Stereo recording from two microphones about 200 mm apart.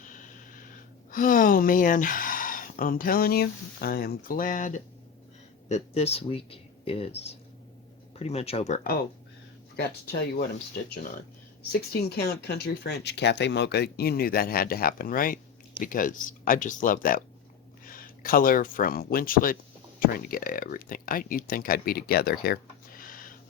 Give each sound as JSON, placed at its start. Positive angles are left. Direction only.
{"t": 1.1, "sound": "speech", "side_deg": 40}
{"t": 8.8, "sound": "speech", "side_deg": 50}
{"t": 11.7, "sound": "speech", "side_deg": 55}